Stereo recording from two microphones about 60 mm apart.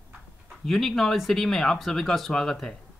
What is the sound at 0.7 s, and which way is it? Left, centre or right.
Speech, centre.